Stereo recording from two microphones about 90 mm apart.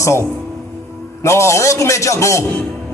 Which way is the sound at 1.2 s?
30° left (ahead or behind).